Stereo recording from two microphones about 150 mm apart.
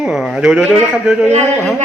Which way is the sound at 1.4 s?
10° left (ahead or behind).